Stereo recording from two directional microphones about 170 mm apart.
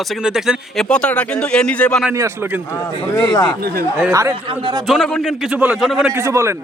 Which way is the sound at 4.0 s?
15° right (ahead or behind).